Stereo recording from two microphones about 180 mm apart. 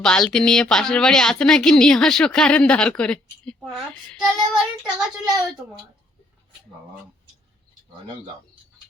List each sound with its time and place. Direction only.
0.0 s a woman's voice: 5° left (ahead or behind)